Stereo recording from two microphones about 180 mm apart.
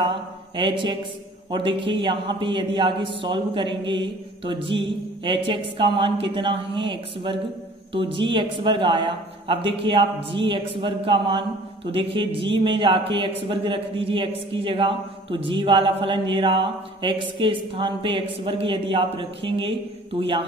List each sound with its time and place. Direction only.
0.6 s a man's voice: 25° right (ahead or behind)